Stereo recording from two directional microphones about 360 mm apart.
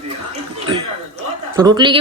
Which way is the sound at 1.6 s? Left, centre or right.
Centre.